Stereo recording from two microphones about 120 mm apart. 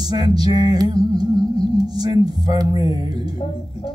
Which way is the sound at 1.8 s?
35° right (ahead or behind).